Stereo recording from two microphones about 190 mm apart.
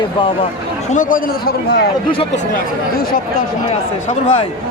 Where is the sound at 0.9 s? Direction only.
45° left (ahead or behind).